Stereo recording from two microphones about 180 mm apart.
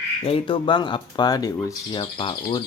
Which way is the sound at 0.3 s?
30° left (ahead or behind).